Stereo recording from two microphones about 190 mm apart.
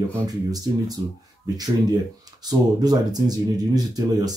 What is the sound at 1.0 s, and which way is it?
Speech, 25° right (ahead or behind).